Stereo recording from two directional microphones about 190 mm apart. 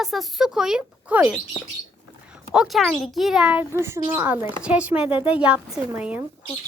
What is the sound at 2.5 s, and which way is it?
A child's voice, centre (ahead or behind).